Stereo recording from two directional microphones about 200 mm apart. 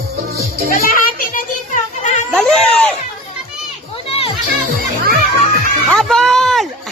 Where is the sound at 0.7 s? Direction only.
45° left (ahead or behind).